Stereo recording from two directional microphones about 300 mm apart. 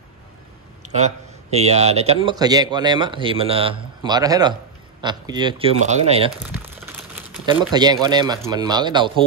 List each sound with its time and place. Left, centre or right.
0.9 s speech: right
6.3 s speech: centre
7.7 s speech: centre